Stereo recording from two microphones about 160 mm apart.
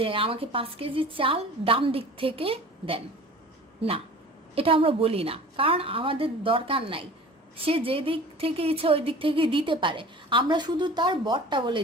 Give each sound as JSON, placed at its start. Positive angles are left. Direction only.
{"t": 0.0, "sound": "a woman's voice", "side_deg": -35}
{"t": 4.5, "sound": "a woman's voice", "side_deg": -35}